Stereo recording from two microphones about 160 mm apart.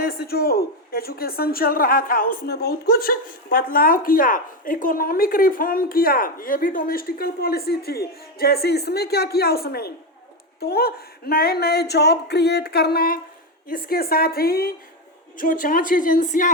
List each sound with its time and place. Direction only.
0.0 s speech: 70° left (ahead or behind)
15.4 s speech: 60° left (ahead or behind)